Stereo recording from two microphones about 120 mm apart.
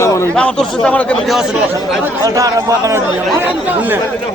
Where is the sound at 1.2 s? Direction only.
Centre (ahead or behind).